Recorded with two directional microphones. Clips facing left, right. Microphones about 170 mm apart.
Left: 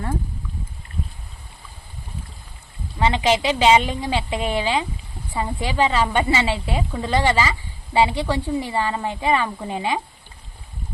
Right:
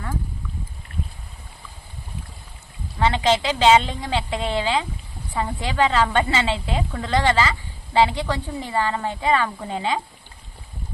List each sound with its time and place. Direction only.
3.0 s a woman's voice: 15° left (ahead or behind)